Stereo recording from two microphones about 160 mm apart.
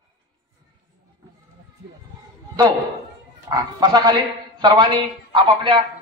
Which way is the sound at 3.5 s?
25° right (ahead or behind).